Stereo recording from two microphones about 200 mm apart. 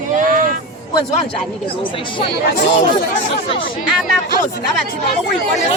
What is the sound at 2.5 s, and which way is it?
Speech, 40° left (ahead or behind).